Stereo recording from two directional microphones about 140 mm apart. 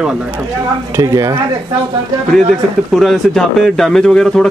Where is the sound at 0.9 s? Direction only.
20° right (ahead or behind).